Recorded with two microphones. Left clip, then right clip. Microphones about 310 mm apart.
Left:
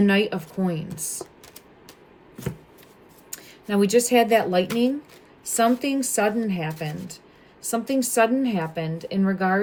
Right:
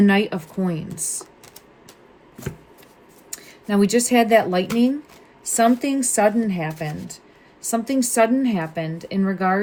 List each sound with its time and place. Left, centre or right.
0.0 s a woman's voice: centre
3.2 s a woman's voice: centre